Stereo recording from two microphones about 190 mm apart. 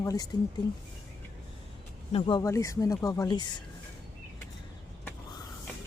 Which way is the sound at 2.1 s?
25° left (ahead or behind).